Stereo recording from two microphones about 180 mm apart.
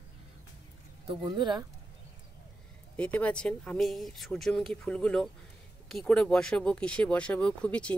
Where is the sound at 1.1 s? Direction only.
25° right (ahead or behind).